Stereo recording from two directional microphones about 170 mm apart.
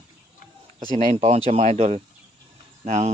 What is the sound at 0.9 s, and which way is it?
Speech, 40° right (ahead or behind).